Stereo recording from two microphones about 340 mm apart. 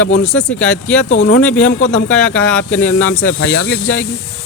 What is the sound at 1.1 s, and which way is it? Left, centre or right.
Speech, left.